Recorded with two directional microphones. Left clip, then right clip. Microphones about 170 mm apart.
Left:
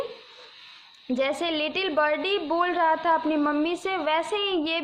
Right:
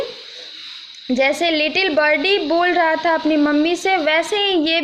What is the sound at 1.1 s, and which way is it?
A woman's voice, 20° right (ahead or behind).